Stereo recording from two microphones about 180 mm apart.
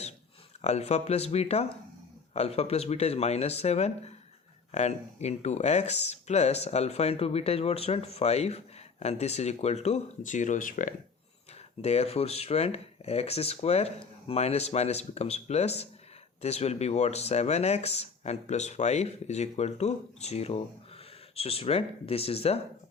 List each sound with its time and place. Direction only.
0.6 s speech: 40° left (ahead or behind)
11.8 s speech: 35° left (ahead or behind)